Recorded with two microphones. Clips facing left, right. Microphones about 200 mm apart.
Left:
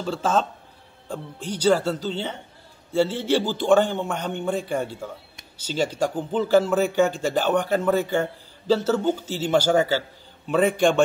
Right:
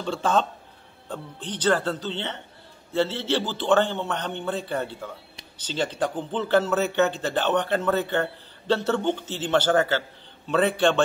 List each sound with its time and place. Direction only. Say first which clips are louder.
0.0 s speech: left 1 dB; 5° left (ahead or behind)